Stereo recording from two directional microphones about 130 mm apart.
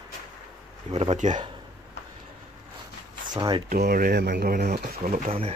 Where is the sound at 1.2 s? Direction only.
75° right (ahead or behind).